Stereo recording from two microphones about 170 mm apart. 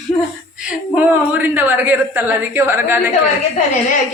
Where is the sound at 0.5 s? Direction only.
10° right (ahead or behind).